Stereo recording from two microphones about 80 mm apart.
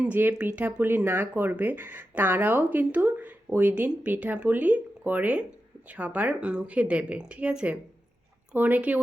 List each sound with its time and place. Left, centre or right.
0.0 s a woman's voice: right